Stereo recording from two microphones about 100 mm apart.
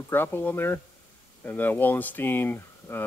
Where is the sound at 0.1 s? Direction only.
20° left (ahead or behind).